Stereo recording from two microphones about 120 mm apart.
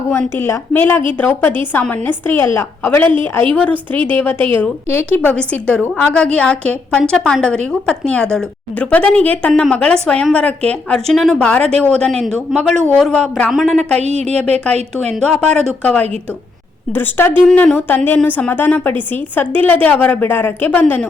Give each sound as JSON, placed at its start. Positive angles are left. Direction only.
{"t": 0.1, "sound": "a woman's voice", "side_deg": 20}
{"t": 14.0, "sound": "a woman's voice", "side_deg": -65}
{"t": 15.0, "sound": "a woman's voice", "side_deg": 5}